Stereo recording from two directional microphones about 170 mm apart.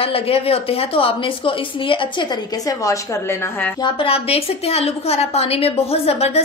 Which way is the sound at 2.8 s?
15° left (ahead or behind).